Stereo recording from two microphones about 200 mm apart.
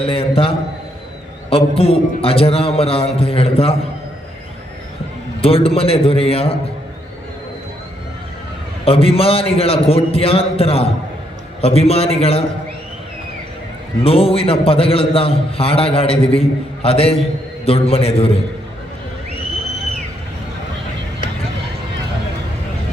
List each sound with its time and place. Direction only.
0.0 s a man's voice: 30° left (ahead or behind)
5.4 s a man's voice: 30° left (ahead or behind)
8.8 s a man's voice: 30° left (ahead or behind)
14.0 s a man's voice: 30° left (ahead or behind)